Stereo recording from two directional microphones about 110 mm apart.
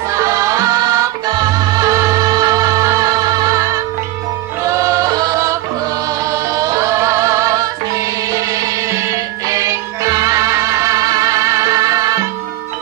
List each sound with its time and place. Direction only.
0.1 s music: 30° right (ahead or behind)